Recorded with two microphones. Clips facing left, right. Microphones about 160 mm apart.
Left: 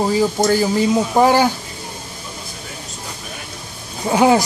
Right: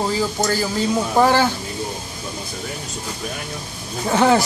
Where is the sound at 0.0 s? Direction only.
15° left (ahead or behind).